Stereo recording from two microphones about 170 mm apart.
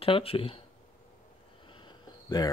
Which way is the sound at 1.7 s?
25° left (ahead or behind).